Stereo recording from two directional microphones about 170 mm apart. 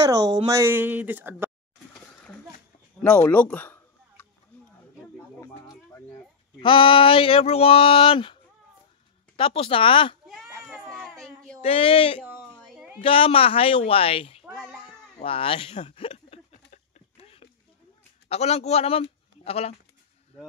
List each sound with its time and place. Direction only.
0.0 s speech: 20° right (ahead or behind)
3.0 s a sound: 10° left (ahead or behind)
5.4 s a sound: 20° left (ahead or behind)
6.6 s speech: 30° left (ahead or behind)
9.4 s speech: 30° left (ahead or behind)
10.2 s baby cry: centre (ahead or behind)
11.6 s speech: 35° left (ahead or behind)
12.4 s a sound: 5° left (ahead or behind)
13.0 s speech: 35° left (ahead or behind)
14.4 s child singing: 5° right (ahead or behind)
15.2 s a sound: 30° left (ahead or behind)
18.3 s a man's voice: 40° left (ahead or behind)